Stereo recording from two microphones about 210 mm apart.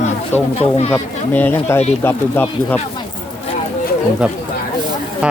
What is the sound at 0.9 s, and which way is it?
Speech, 10° left (ahead or behind).